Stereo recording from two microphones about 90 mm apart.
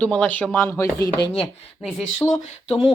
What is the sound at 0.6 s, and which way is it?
Speech, 25° left (ahead or behind).